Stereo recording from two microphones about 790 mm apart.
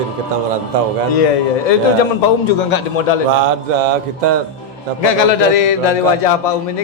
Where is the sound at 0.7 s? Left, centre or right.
Right.